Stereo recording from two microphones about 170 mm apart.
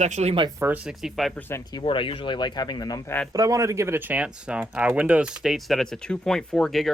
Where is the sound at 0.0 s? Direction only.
40° right (ahead or behind).